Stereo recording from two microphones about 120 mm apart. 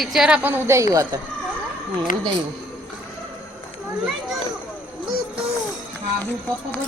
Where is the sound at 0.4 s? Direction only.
20° right (ahead or behind).